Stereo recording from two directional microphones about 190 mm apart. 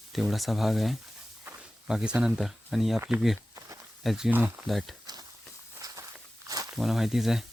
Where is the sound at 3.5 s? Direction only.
15° right (ahead or behind).